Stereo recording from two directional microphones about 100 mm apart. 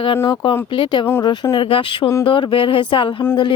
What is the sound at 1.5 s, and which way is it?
Speech, 60° left (ahead or behind).